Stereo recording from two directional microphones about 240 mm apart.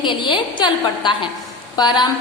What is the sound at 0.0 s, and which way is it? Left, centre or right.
A woman's voice, centre.